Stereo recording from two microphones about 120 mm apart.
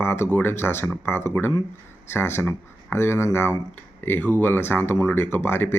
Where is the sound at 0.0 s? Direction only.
20° left (ahead or behind).